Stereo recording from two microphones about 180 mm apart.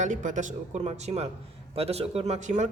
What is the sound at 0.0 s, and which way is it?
Speech, 45° right (ahead or behind).